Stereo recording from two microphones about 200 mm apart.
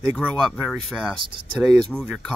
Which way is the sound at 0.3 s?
Centre (ahead or behind).